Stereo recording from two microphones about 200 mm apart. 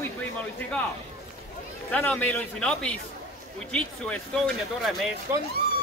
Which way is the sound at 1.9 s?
5° left (ahead or behind).